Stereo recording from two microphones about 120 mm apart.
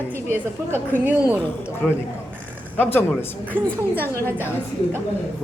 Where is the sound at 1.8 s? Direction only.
10° left (ahead or behind).